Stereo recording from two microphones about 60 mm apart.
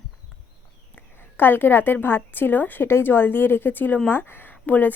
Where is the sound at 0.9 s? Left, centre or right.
Left.